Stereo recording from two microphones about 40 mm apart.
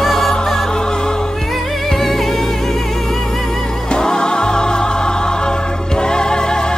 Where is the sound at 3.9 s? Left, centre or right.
Left.